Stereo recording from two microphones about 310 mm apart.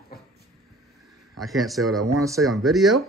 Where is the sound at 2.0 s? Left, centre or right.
Centre.